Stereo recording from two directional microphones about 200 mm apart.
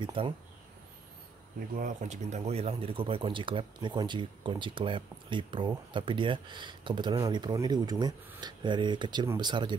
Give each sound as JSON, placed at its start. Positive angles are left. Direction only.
{"t": 0.0, "sound": "speech", "side_deg": -25}
{"t": 1.8, "sound": "speech", "side_deg": -40}